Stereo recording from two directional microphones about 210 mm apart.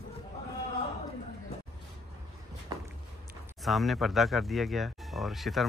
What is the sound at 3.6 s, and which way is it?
Speech, centre (ahead or behind).